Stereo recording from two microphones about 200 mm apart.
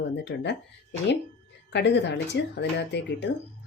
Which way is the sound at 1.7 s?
60° left (ahead or behind).